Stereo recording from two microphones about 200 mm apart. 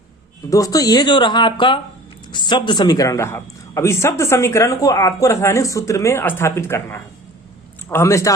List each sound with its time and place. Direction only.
0.5 s speech: 15° left (ahead or behind)